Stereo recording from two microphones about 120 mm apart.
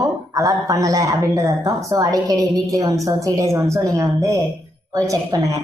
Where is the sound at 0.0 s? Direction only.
30° right (ahead or behind).